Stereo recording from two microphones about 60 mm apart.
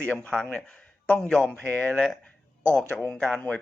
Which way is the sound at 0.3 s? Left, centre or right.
Centre.